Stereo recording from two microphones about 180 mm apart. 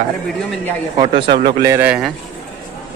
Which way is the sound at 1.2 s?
55° right (ahead or behind).